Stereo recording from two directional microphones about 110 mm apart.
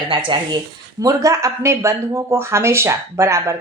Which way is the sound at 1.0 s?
30° right (ahead or behind).